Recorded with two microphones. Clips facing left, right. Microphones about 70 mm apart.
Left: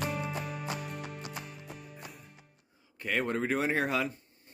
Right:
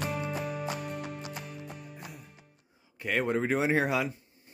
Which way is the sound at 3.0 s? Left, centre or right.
Centre.